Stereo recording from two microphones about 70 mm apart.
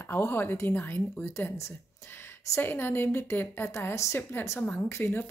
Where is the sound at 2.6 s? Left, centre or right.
Left.